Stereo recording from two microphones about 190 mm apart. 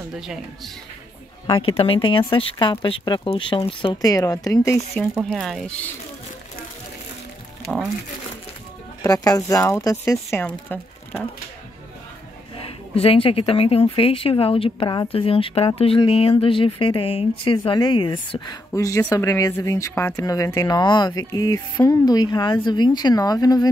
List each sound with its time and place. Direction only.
1.5 s speech: 30° left (ahead or behind)
5.1 s speech: centre (ahead or behind)
9.0 s speech: 20° left (ahead or behind)
12.5 s speech: 30° left (ahead or behind)